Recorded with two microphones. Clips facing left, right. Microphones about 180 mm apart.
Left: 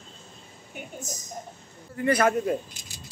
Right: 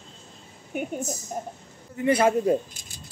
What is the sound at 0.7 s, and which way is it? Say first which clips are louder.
Speech: right 9 dB; 65° right (ahead or behind).